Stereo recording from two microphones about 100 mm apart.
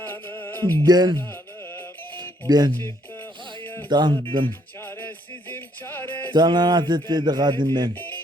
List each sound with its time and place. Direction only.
0.0 s music: 20° left (ahead or behind)
0.9 s music: 40° right (ahead or behind)
3.8 s speech: 45° right (ahead or behind)
4.8 s music: 25° left (ahead or behind)
6.3 s speech: 45° right (ahead or behind)
7.9 s music: 20° left (ahead or behind)